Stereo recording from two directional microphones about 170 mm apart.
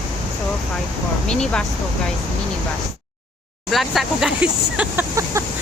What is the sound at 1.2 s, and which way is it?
Speech, 5° left (ahead or behind).